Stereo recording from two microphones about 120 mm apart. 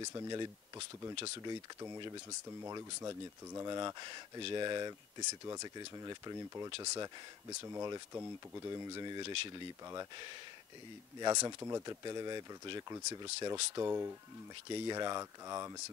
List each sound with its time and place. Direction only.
0.0 s speech: 30° right (ahead or behind)
2.6 s speech: 25° right (ahead or behind)
8.6 s speech: 30° right (ahead or behind)
14.7 s speech: 35° right (ahead or behind)